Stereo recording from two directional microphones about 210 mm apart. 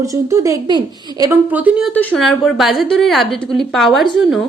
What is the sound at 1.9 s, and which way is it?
A woman's voice, 5° left (ahead or behind).